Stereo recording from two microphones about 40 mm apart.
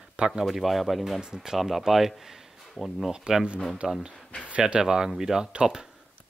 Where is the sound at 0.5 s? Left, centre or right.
Centre.